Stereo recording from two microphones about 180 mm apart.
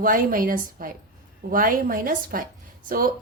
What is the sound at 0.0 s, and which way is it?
A woman's voice, 50° right (ahead or behind).